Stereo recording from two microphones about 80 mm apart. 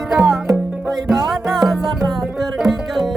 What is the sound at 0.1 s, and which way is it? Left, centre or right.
Music, centre.